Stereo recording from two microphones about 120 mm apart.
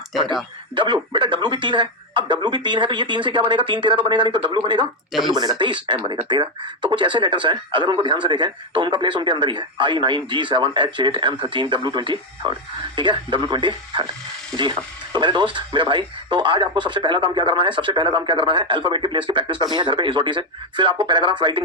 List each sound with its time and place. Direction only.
1.1 s speech: 40° right (ahead or behind)